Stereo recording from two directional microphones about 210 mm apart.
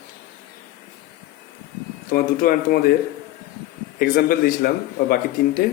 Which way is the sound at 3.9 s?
45° left (ahead or behind).